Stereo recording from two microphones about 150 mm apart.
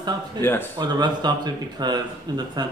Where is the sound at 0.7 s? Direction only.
30° right (ahead or behind).